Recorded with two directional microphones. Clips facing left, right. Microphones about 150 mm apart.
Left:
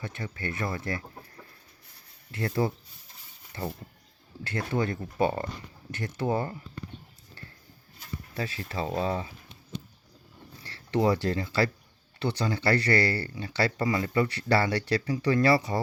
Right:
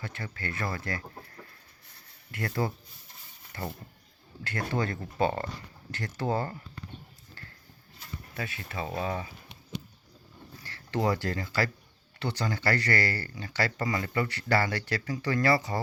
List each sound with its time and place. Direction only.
0.0 s speech: 20° left (ahead or behind)
8.4 s speech: 30° left (ahead or behind)
10.6 s speech: 25° left (ahead or behind)